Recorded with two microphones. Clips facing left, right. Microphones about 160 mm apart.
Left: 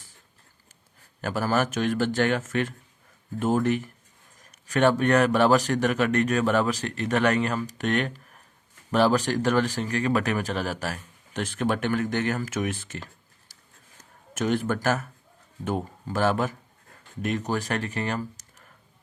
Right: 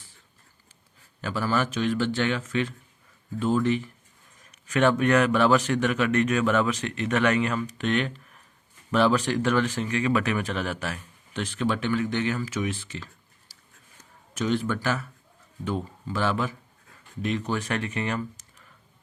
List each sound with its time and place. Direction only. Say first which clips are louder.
1.2 s a man's voice: left 1 dB; 45° left (ahead or behind)
4.6 s speech: even; 35° left (ahead or behind)
14.3 s a man's voice: left 1 dB; 50° left (ahead or behind)